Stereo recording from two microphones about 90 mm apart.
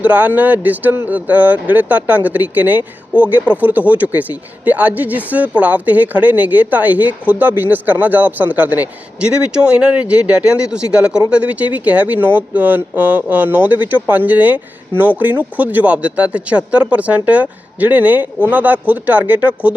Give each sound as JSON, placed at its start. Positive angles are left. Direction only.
{"t": 0.0, "sound": "speech", "side_deg": -15}